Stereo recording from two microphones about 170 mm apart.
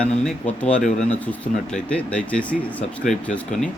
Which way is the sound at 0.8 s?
45° left (ahead or behind).